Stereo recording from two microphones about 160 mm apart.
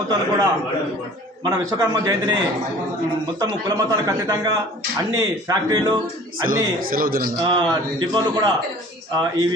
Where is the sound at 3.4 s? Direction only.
25° right (ahead or behind).